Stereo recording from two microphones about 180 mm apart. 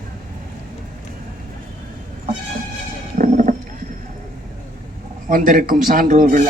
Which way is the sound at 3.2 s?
45° right (ahead or behind).